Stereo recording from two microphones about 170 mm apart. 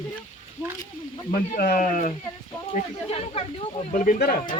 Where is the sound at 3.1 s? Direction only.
35° left (ahead or behind).